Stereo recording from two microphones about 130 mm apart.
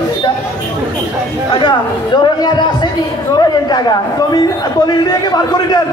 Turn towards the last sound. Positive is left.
turn(degrees=30)  # may be behind; listen again after turning